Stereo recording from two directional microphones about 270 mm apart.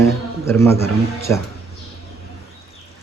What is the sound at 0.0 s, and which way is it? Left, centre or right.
A man's voice, centre.